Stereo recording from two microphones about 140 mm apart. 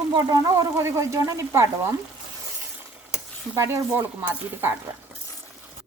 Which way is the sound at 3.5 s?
20° right (ahead or behind).